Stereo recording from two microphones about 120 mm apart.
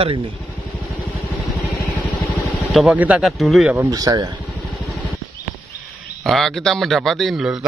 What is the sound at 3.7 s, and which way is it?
Speech, 30° right (ahead or behind).